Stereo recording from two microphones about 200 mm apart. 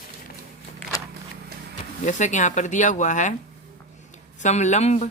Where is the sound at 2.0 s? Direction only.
35° left (ahead or behind).